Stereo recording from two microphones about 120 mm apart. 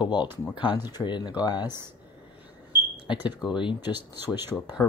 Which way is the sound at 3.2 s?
40° left (ahead or behind).